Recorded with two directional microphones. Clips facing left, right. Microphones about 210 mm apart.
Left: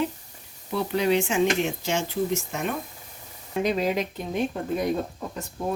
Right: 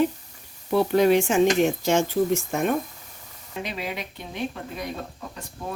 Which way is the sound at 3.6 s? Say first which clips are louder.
Left 8 dB; 45° left (ahead or behind).